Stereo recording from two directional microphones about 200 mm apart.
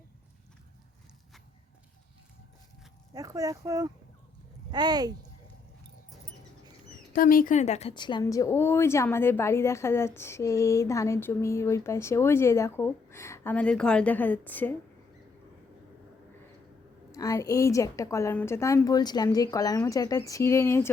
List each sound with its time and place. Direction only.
3.1 s speech: 15° right (ahead or behind)
7.1 s speech: 45° left (ahead or behind); by 14.7 s 10° left (ahead or behind)
17.1 s speech: 15° left (ahead or behind)